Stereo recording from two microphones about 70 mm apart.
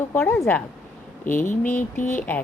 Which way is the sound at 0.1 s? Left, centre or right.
Left.